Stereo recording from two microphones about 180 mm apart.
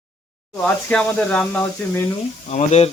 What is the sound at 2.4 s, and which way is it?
Speech, 40° left (ahead or behind).